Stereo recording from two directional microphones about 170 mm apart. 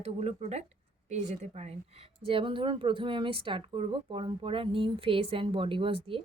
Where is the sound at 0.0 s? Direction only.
40° right (ahead or behind).